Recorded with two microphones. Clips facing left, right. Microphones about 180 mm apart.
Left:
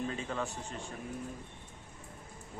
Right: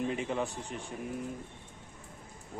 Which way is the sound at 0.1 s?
15° right (ahead or behind).